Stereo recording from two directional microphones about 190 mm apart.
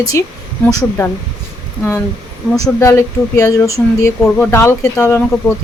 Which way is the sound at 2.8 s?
15° left (ahead or behind).